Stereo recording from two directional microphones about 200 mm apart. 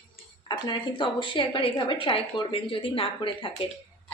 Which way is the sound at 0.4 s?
20° left (ahead or behind).